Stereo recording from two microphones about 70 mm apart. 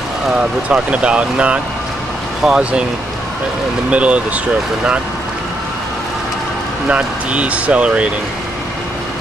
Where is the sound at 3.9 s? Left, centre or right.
Centre.